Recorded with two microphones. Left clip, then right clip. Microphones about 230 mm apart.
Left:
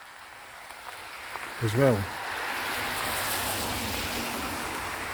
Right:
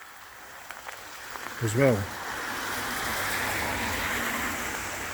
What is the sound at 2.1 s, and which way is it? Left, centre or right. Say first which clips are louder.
Waves: left 1 dB; right.